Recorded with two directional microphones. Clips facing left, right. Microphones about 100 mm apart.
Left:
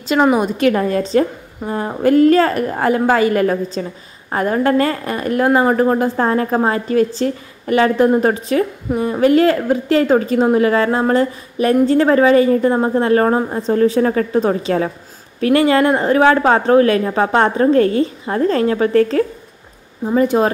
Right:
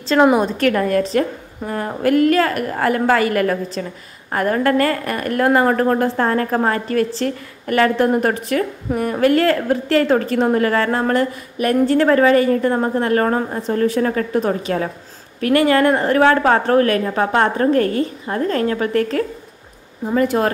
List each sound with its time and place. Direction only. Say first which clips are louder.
0.4 s a woman's voice: left 2 dB; 15° left (ahead or behind)
20.2 s a woman's voice: left 3 dB; 20° left (ahead or behind)